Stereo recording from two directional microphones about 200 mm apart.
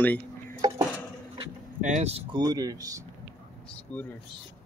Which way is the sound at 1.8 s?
35° right (ahead or behind).